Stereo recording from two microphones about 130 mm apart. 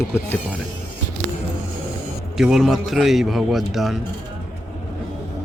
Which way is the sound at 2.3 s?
Centre (ahead or behind).